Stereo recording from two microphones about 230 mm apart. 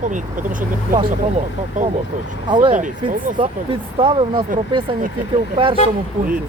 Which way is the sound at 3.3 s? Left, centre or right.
Right.